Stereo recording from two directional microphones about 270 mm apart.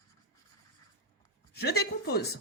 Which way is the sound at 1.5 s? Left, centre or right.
Left.